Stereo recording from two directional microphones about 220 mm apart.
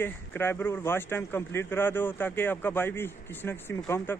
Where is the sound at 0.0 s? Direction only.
10° left (ahead or behind).